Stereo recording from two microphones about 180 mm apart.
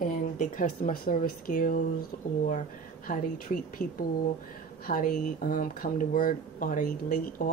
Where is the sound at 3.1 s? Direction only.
50° left (ahead or behind).